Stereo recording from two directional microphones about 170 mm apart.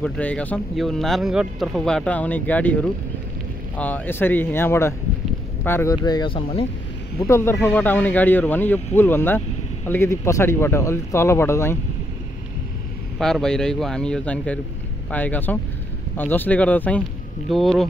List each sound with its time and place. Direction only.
0.0 s speech: 10° left (ahead or behind); by 6.6 s 30° left (ahead or behind)
7.2 s speech: 15° left (ahead or behind)
13.2 s speech: 5° left (ahead or behind)